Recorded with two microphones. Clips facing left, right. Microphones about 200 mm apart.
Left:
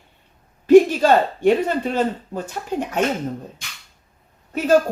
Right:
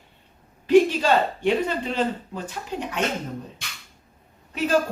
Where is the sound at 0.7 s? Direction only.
45° left (ahead or behind).